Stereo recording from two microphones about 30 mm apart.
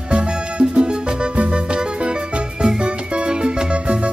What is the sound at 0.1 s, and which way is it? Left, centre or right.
Music, right.